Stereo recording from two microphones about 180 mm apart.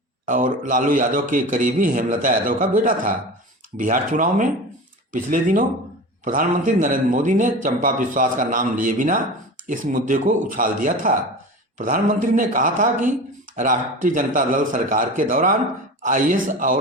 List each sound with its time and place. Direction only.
0.3 s a man's voice: 45° right (ahead or behind)